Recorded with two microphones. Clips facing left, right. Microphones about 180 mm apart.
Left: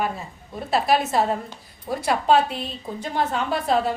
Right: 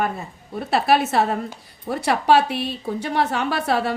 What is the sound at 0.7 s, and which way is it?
Speech, 65° right (ahead or behind).